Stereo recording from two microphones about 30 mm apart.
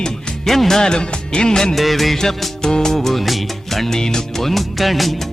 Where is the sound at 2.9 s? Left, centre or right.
Centre.